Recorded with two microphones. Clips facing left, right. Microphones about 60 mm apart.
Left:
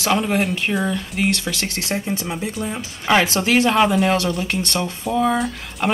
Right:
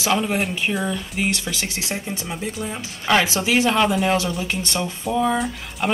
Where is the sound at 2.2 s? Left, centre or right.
Centre.